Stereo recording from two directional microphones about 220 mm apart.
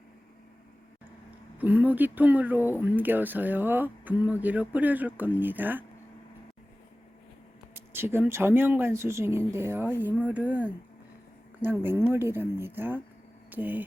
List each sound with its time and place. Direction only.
1.5 s speech: 5° right (ahead or behind)
7.7 s speech: 10° right (ahead or behind)